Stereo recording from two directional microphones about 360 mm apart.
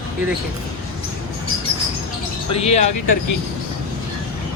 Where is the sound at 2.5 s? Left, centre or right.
Centre.